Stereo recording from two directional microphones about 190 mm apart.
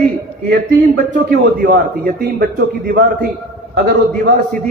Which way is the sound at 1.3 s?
55° right (ahead or behind).